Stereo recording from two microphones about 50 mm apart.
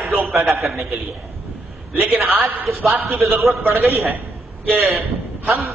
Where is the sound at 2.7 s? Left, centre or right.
Right.